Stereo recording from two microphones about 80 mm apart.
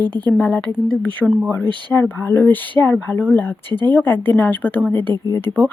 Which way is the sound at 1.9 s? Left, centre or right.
Centre.